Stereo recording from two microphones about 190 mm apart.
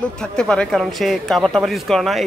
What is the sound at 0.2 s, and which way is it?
Speech, 5° left (ahead or behind).